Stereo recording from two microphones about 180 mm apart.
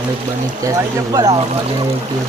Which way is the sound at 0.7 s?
20° right (ahead or behind).